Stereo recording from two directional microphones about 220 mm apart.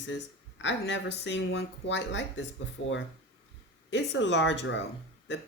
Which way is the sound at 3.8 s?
55° left (ahead or behind).